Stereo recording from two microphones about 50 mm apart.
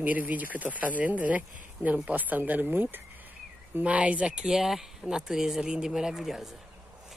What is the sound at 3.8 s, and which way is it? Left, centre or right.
Speech, right.